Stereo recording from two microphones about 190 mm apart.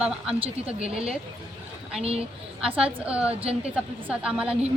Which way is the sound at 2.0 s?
30° right (ahead or behind).